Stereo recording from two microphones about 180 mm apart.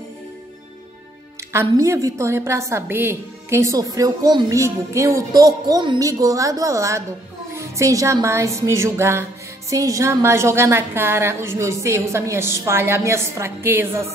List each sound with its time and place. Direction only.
1.5 s a woman's voice: 15° right (ahead or behind)